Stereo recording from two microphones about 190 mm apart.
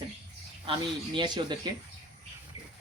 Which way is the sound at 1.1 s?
25° right (ahead or behind).